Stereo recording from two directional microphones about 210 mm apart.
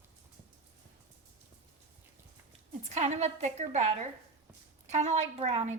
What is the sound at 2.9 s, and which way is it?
A woman's voice, 30° right (ahead or behind).